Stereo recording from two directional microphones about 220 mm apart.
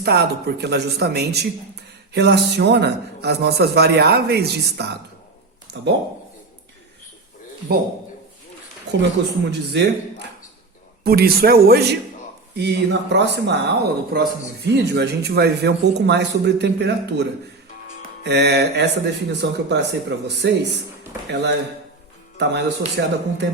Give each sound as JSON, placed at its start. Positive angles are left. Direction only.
{"t": 0.0, "sound": "speech", "side_deg": -45}
{"t": 8.9, "sound": "speech", "side_deg": -50}
{"t": 22.4, "sound": "speech", "side_deg": -50}